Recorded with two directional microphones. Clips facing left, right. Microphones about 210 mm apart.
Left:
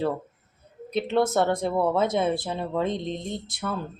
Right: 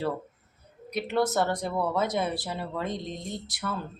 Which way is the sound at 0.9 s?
25° left (ahead or behind).